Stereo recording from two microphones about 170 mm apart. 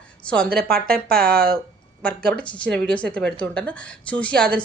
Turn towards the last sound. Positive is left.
turn(degrees=5)  # may be behind; listen again after turning